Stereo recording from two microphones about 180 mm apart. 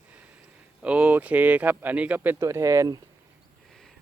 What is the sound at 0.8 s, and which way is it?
Speech, 5° right (ahead or behind).